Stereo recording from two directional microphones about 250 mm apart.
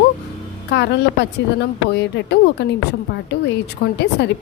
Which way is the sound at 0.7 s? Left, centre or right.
Left.